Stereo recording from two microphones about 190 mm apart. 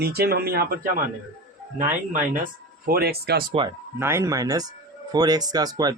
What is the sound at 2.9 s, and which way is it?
Speech, 55° right (ahead or behind).